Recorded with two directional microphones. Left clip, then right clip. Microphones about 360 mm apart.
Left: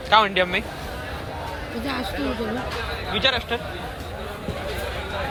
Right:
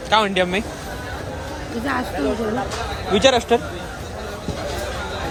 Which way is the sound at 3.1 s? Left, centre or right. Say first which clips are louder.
Right 7 dB; centre.